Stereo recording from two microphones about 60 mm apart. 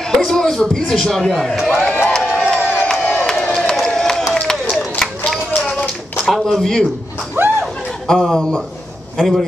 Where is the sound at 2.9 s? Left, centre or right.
Centre.